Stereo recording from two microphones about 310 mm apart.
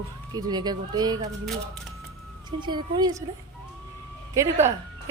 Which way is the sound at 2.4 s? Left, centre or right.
Centre.